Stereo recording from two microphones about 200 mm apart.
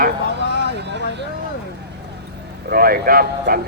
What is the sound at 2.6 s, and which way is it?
Speech, 50° right (ahead or behind).